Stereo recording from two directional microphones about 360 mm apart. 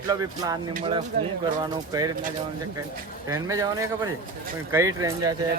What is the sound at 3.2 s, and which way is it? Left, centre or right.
Speech, centre.